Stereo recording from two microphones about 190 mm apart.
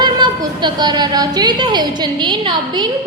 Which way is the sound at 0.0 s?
25° right (ahead or behind).